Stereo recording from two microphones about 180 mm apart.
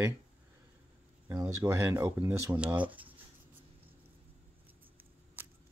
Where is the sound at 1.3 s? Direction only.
15° right (ahead or behind).